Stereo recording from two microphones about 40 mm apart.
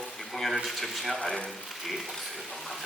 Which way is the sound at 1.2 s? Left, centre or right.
Centre.